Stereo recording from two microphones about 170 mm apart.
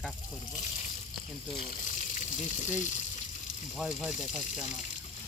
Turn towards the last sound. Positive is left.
turn(degrees=45)  # may be behind; listen again after turning